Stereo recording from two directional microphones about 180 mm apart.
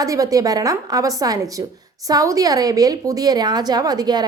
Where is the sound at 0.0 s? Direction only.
20° right (ahead or behind).